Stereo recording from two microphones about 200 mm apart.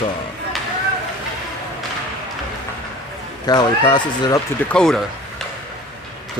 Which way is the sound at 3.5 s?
20° left (ahead or behind).